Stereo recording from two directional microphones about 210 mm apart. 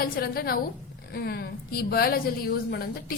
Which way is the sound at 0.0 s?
45° left (ahead or behind).